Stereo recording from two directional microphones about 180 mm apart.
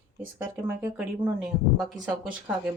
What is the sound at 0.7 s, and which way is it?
Speech, 10° right (ahead or behind).